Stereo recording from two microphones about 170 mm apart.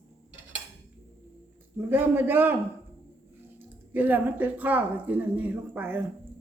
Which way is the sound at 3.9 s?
10° right (ahead or behind).